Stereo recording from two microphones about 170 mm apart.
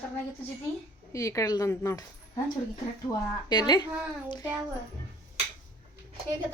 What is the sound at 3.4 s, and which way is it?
Speech, 25° left (ahead or behind).